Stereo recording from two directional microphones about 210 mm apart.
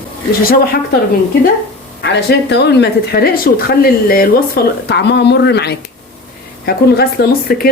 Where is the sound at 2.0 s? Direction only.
55° left (ahead or behind).